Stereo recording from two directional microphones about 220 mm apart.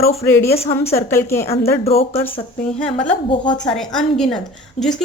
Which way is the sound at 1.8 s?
25° left (ahead or behind).